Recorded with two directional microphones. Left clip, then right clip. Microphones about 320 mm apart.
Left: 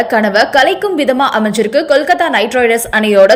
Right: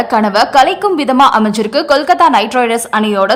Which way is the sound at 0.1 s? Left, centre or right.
Centre.